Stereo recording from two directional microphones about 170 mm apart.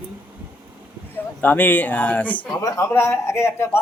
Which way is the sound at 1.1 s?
10° left (ahead or behind).